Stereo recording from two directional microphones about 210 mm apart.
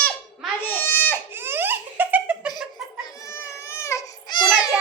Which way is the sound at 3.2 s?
15° left (ahead or behind).